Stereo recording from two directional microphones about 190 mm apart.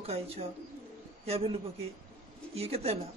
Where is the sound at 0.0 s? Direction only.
30° right (ahead or behind).